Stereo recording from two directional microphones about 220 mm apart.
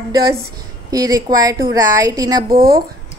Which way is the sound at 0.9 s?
15° right (ahead or behind).